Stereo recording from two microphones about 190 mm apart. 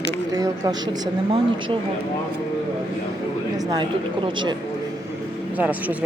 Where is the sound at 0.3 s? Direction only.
20° right (ahead or behind).